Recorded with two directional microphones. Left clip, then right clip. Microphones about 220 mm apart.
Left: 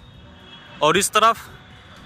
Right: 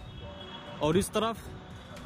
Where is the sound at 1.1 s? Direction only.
30° left (ahead or behind).